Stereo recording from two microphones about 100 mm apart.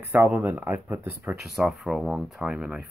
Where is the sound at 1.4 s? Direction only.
Centre (ahead or behind).